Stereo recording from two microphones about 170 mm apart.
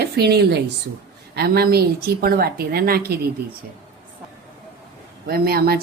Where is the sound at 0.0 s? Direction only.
70° right (ahead or behind).